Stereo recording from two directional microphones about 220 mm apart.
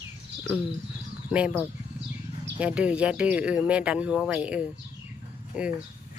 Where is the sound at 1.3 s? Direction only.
5° right (ahead or behind).